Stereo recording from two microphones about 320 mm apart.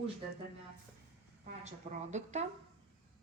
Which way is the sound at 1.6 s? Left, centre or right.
Right.